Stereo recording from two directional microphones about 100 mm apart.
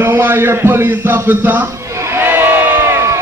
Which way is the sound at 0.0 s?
20° right (ahead or behind).